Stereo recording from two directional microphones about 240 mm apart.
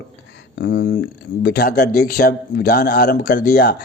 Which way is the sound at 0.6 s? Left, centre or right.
Left.